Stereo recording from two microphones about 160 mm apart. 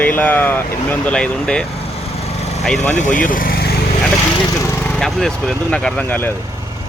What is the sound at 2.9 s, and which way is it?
Speech, 50° left (ahead or behind).